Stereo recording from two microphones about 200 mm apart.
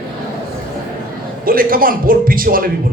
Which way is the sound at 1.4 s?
45° right (ahead or behind).